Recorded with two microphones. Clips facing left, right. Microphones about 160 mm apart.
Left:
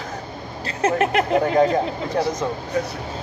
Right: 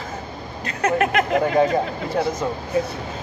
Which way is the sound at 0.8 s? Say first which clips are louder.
Even; 30° left (ahead or behind).